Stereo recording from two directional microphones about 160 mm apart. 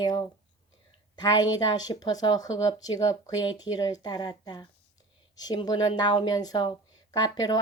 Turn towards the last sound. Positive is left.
turn(degrees=25)  # may be behind; listen again after turning